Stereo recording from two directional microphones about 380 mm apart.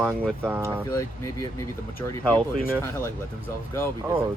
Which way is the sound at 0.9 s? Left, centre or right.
Centre.